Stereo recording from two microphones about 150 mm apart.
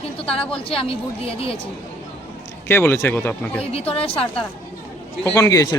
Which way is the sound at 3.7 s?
40° left (ahead or behind).